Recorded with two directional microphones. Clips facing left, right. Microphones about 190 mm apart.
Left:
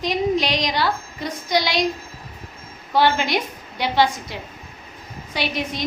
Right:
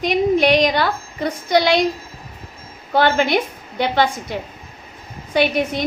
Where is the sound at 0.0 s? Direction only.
55° right (ahead or behind).